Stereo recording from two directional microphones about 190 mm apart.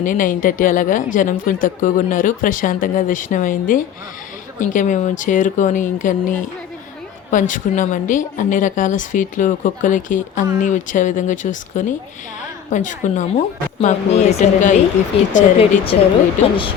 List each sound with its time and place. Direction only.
0.0 s speech: 45° left (ahead or behind)